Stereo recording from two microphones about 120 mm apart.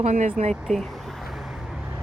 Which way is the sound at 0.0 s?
70° right (ahead or behind).